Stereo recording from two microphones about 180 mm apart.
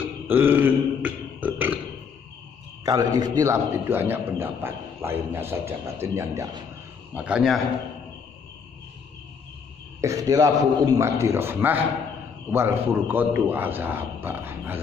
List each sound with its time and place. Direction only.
0.3 s burping: 10° right (ahead or behind)
2.8 s a man's voice: 20° right (ahead or behind)
7.2 s a man's voice: 5° right (ahead or behind)
10.0 s a man's voice: 20° right (ahead or behind)